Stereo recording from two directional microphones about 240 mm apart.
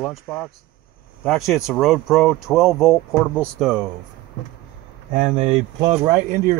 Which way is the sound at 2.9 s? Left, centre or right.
Centre.